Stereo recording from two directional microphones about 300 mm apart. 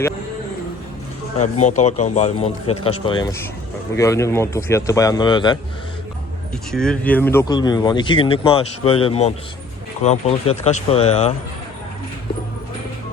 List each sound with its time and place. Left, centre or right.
1.6 s speech: left
6.7 s speech: centre; by 11.3 s left